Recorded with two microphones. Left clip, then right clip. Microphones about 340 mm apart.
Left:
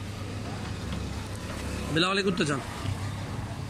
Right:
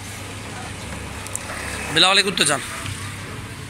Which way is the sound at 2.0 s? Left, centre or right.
Centre.